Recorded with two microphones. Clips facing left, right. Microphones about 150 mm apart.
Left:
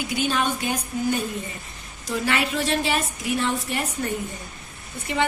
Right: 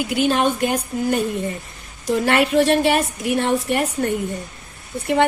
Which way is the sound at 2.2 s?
55° right (ahead or behind).